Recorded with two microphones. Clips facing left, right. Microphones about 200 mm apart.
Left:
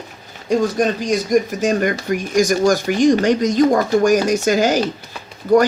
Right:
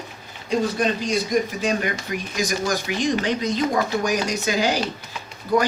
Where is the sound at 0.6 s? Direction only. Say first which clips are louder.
Left 4 dB; 45° left (ahead or behind).